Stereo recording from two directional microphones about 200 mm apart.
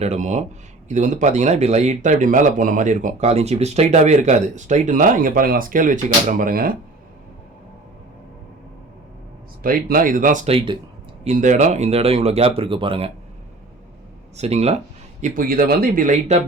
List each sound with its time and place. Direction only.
0.0 s speech: 35° right (ahead or behind)
9.6 s speech: 45° right (ahead or behind); by 13.1 s 25° right (ahead or behind)
14.3 s speech: 30° right (ahead or behind)
15.2 s speech: 45° right (ahead or behind)